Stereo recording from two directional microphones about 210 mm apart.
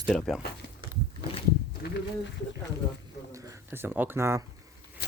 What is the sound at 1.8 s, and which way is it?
Speech, 50° left (ahead or behind).